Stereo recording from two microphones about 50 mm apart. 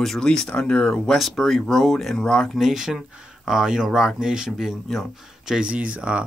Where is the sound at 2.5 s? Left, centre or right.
Centre.